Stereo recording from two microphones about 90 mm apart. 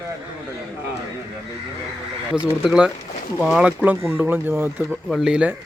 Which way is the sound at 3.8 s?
25° right (ahead or behind).